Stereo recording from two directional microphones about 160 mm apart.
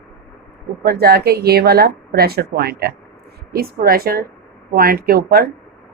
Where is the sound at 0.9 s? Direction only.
75° right (ahead or behind).